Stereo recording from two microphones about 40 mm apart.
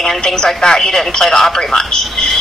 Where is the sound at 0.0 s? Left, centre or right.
Centre.